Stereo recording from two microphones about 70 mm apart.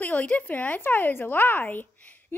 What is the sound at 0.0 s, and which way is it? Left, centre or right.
A woman's voice, left.